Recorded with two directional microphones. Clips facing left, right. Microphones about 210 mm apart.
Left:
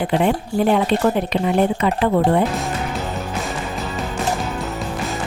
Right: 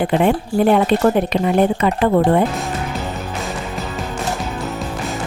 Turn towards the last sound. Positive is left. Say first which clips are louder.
# right 1 dB
turn(degrees=0)  # may be behind; listen again after turning